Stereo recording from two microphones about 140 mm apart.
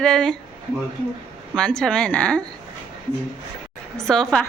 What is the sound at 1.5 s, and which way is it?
Speech, 5° left (ahead or behind).